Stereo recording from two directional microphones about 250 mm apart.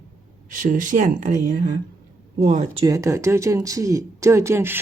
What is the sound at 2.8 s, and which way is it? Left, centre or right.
Speech, centre.